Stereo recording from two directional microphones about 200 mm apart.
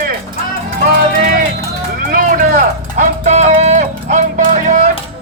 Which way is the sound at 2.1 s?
40° right (ahead or behind).